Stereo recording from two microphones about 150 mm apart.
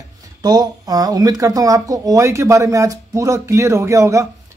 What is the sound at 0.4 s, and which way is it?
Speech, 25° right (ahead or behind).